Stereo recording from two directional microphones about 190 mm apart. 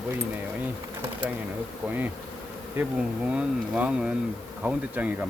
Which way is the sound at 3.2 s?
5° right (ahead or behind).